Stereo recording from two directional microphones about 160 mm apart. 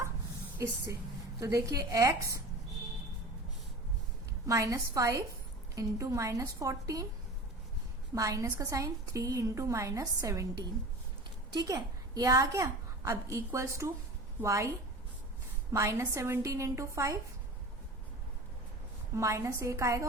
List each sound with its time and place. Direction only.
1.4 s a woman's voice: 20° right (ahead or behind)
4.4 s a woman's voice: 20° right (ahead or behind)
8.1 s a woman's voice: 20° right (ahead or behind)
15.7 s a woman's voice: 20° right (ahead or behind)
19.1 s a woman's voice: 20° right (ahead or behind)